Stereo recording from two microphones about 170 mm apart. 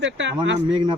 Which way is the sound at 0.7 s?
30° right (ahead or behind).